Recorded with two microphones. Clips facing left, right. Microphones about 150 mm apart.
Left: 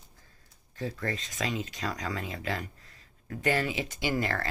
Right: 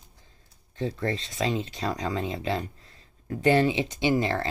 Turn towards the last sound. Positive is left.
turn(degrees=-20)  # may be behind; listen again after turning